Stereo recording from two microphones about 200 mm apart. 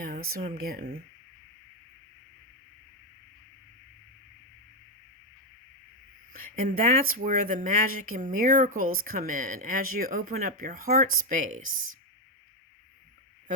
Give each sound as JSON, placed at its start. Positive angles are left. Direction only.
{"t": 0.0, "sound": "speech", "side_deg": -45}
{"t": 6.7, "sound": "speech", "side_deg": -45}